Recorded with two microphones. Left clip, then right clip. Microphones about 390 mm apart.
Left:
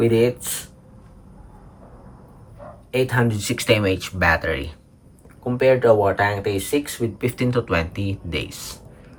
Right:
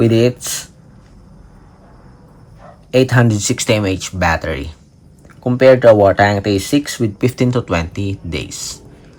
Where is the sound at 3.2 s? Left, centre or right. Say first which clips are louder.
Right 4 dB; centre.